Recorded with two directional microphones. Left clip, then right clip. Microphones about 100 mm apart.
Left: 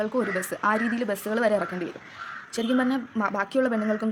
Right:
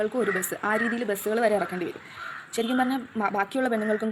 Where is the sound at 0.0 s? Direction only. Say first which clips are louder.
Right 1 dB; 25° left (ahead or behind).